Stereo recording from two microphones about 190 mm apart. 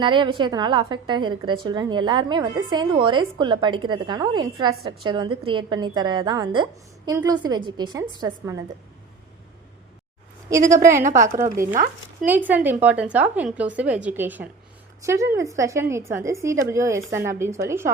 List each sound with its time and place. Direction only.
0.0 s a woman's voice: 25° right (ahead or behind)
11.2 s a woman's voice: 45° right (ahead or behind)
12.2 s a woman's voice: 10° right (ahead or behind)